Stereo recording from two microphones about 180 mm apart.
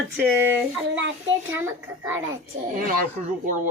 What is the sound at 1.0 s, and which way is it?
Speech, 90° right.